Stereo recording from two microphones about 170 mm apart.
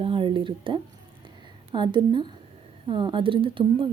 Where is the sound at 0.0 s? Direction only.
30° right (ahead or behind).